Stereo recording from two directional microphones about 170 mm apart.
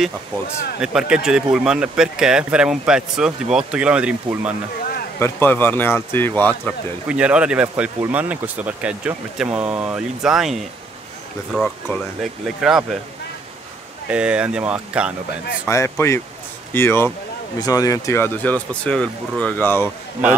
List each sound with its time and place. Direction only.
0.7 s speech: 5° right (ahead or behind)
5.2 s speech: 10° left (ahead or behind)
7.1 s speech: 5° right (ahead or behind)
14.0 s speech: 5° right (ahead or behind)
15.6 s speech: 15° left (ahead or behind)